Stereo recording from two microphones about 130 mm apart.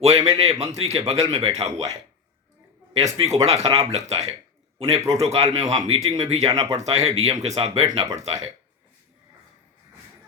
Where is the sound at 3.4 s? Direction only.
55° right (ahead or behind).